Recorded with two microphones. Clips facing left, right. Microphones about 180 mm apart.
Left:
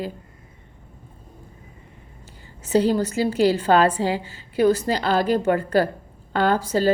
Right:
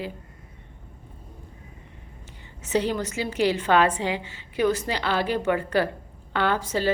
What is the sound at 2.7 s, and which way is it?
A woman's voice, 35° left (ahead or behind).